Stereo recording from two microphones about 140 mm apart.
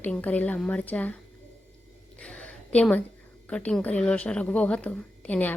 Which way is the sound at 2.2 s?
10° left (ahead or behind).